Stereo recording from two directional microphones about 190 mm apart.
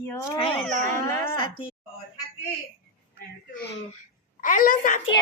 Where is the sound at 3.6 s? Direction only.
60° left (ahead or behind).